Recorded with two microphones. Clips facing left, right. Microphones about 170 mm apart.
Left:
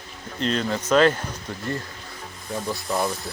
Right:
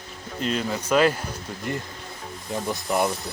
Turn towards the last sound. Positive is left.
turn(degrees=-20)  # may be behind; listen again after turning